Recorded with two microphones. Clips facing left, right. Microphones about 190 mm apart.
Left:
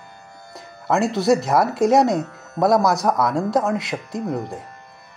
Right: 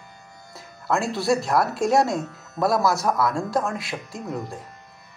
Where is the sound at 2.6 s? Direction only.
20° left (ahead or behind).